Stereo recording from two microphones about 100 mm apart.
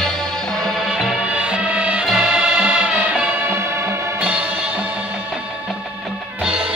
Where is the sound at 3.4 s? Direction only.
25° right (ahead or behind).